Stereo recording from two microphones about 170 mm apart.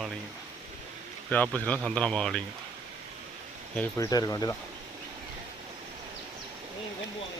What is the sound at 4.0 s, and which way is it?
Speech, 20° left (ahead or behind).